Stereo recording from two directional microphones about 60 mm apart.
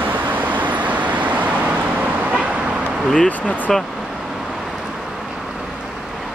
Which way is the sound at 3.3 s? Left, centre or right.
Left.